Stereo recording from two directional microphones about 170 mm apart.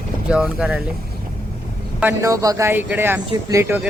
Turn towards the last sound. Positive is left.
turn(degrees=-15)  # may be behind; listen again after turning